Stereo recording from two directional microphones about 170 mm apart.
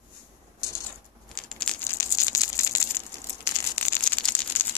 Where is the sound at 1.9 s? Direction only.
20° left (ahead or behind).